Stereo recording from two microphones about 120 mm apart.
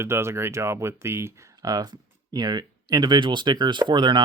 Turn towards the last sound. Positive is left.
turn(degrees=-40)  # may be behind; listen again after turning